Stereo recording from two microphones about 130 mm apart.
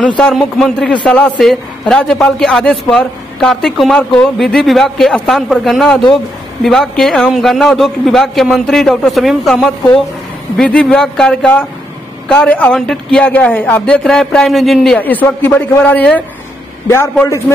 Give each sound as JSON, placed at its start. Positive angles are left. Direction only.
{"t": 0.3, "sound": "a man's voice", "side_deg": 0}
{"t": 15.0, "sound": "a man's voice", "side_deg": 15}